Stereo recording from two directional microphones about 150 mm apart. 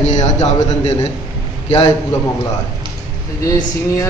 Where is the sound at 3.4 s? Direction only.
20° left (ahead or behind).